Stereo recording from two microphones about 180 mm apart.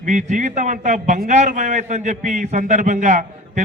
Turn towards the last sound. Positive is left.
turn(degrees=-40)  # may be behind; listen again after turning